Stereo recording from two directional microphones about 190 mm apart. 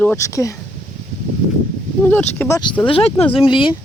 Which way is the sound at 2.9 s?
30° left (ahead or behind).